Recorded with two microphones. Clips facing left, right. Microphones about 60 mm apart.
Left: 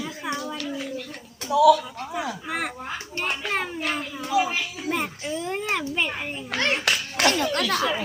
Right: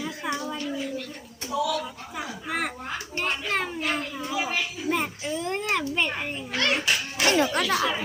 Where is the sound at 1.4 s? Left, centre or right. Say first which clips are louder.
Left 11 dB; left.